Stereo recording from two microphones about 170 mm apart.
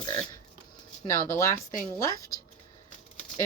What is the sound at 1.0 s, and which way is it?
Speech, 20° left (ahead or behind).